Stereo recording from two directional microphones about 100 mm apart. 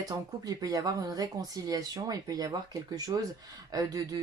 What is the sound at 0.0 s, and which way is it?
Speech, 35° right (ahead or behind).